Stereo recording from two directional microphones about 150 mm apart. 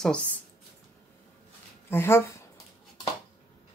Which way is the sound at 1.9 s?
15° left (ahead or behind).